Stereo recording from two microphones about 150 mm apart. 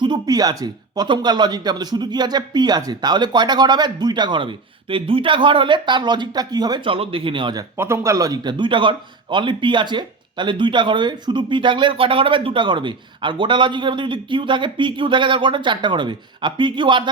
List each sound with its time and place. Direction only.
0.0 s speech: 30° right (ahead or behind)
7.8 s a man's voice: 15° right (ahead or behind); by 17.0 s 30° right (ahead or behind)